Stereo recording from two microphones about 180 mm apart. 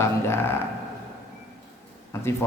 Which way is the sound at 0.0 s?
15° left (ahead or behind).